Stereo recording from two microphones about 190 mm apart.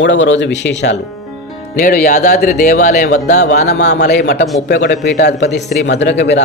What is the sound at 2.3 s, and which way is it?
Speech, 55° left (ahead or behind).